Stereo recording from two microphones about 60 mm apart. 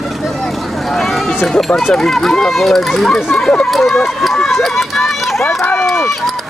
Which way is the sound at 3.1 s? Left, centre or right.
Centre.